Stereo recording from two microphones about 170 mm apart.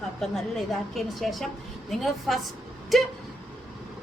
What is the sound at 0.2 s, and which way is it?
A woman's voice, centre (ahead or behind).